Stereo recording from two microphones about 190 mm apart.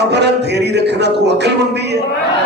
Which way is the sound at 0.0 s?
65° right (ahead or behind).